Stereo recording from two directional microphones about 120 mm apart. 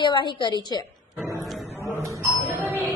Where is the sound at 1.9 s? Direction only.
25° right (ahead or behind).